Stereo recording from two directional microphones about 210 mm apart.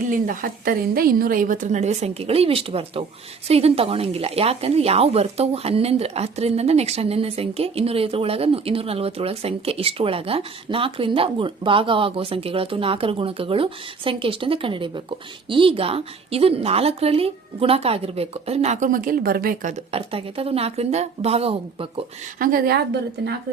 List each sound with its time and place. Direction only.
0.1 s a woman's voice: 40° right (ahead or behind)
22.4 s a woman's voice: 40° right (ahead or behind)